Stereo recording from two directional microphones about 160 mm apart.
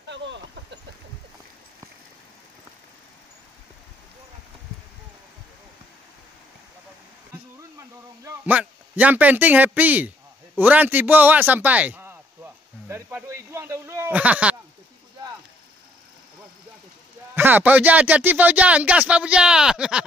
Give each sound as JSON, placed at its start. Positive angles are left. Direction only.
{"t": 8.5, "sound": "speech", "side_deg": -10}
{"t": 12.8, "sound": "a sound", "side_deg": -15}
{"t": 17.4, "sound": "speech", "side_deg": -10}